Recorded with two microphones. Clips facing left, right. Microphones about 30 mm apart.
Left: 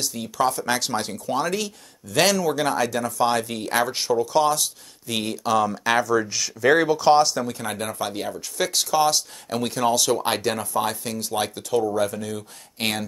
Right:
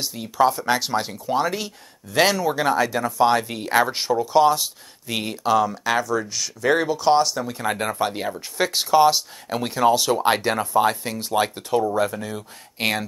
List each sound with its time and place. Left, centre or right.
0.2 s speech: centre
7.5 s speech: centre
10.8 s speech: centre
12.4 s speech: centre